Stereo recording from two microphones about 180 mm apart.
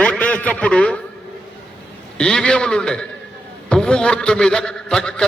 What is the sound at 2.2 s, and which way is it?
A man's voice, 5° left (ahead or behind).